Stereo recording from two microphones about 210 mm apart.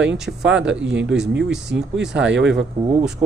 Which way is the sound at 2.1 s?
60° right (ahead or behind).